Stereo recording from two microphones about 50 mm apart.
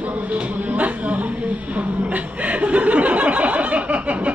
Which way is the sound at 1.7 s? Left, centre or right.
Right.